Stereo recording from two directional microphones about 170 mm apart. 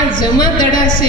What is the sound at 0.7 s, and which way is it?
Speech, 55° left (ahead or behind).